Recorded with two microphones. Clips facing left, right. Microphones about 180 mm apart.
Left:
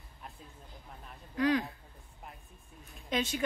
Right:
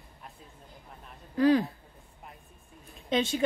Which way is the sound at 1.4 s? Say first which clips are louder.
Right 6 dB; 30° right (ahead or behind).